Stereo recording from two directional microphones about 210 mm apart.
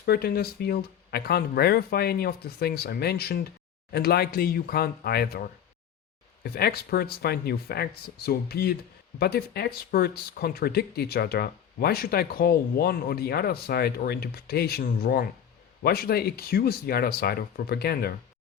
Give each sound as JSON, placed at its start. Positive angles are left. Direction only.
{"t": 0.0, "sound": "speech", "side_deg": 45}